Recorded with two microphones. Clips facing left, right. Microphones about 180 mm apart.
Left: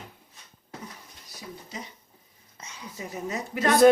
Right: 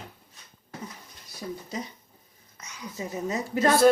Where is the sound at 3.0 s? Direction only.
25° right (ahead or behind).